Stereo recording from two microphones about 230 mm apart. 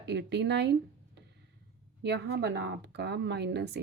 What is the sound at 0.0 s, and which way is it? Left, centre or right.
Speech, right.